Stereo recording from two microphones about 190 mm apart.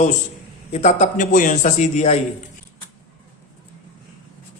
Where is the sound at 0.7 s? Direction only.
35° left (ahead or behind).